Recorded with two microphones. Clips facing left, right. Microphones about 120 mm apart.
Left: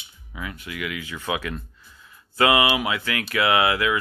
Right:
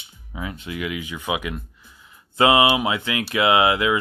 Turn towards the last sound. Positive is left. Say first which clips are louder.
# right 3 dB
turn(degrees=-20)  # may be behind; listen again after turning